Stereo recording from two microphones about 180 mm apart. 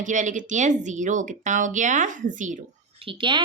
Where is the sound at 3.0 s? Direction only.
25° right (ahead or behind).